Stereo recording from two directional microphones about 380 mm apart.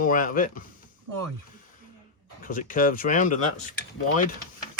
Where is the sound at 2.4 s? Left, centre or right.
Left.